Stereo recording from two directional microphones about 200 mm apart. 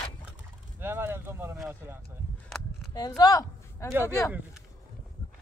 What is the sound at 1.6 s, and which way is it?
Speech, 10° right (ahead or behind).